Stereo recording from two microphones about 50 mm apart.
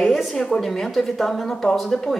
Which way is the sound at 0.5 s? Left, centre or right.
Centre.